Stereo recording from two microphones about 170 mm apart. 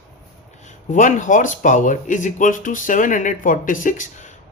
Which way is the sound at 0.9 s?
50° left (ahead or behind).